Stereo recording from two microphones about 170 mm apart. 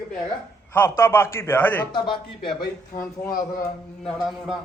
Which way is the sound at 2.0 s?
30° left (ahead or behind).